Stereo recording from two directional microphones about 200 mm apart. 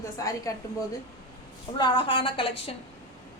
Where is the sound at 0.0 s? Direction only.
15° left (ahead or behind).